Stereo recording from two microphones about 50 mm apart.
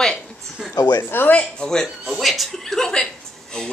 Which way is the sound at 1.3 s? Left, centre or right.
Left.